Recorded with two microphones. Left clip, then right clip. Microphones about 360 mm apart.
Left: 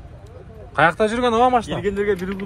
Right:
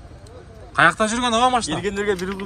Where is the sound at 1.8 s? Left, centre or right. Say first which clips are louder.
Left 1 dB; right.